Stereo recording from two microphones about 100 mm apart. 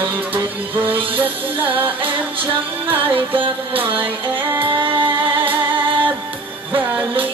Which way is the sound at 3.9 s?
20° right (ahead or behind).